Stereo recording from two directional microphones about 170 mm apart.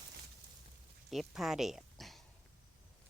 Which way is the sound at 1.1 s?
Centre (ahead or behind).